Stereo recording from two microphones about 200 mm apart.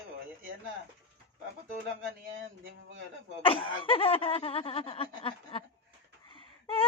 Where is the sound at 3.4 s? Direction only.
25° left (ahead or behind).